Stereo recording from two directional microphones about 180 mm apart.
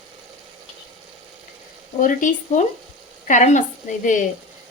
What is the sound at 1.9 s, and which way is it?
Speech, 45° left (ahead or behind).